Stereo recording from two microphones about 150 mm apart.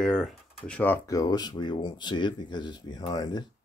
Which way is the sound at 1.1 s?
25° left (ahead or behind).